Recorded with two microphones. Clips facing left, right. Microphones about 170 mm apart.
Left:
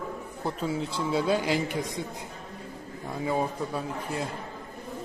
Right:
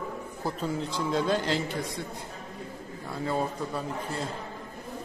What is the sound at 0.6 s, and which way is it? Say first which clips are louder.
A man's voice: left 1 dB; 5° left (ahead or behind).